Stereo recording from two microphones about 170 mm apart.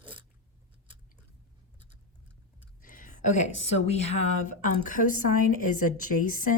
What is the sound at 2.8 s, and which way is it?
A woman's voice, 55° left (ahead or behind).